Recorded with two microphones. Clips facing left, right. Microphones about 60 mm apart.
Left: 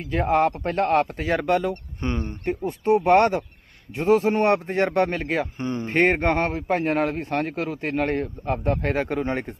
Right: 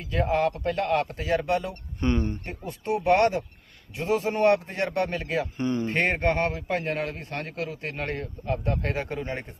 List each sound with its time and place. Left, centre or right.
0.1 s a man's voice: left
1.3 s speech: left
1.7 s a man's voice: left
8.9 s speech: left